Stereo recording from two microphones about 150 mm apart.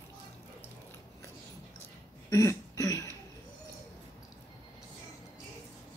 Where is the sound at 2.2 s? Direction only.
20° left (ahead or behind).